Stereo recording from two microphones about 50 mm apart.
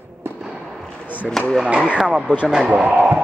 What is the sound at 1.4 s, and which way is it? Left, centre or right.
Speech, centre.